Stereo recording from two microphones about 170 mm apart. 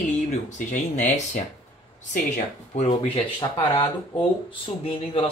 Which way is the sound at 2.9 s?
30° left (ahead or behind).